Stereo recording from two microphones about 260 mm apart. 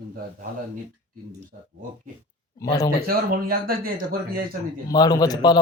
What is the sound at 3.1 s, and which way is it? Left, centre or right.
Speech, right.